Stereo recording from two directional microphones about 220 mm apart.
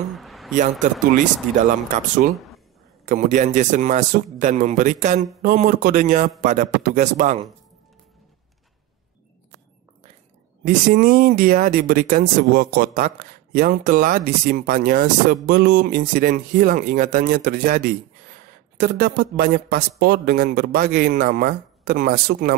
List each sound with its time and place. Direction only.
0.1 s a sound: centre (ahead or behind)
0.6 s speech: 35° right (ahead or behind)
3.1 s speech: 35° right (ahead or behind)
10.6 s speech: 40° right (ahead or behind)